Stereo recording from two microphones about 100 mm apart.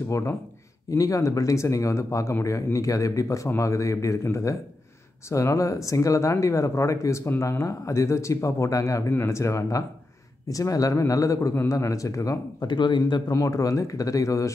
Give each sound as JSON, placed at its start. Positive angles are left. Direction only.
{"t": 0.1, "sound": "speech", "side_deg": 25}
{"t": 12.6, "sound": "speech", "side_deg": 50}
{"t": 13.3, "sound": "speech", "side_deg": 35}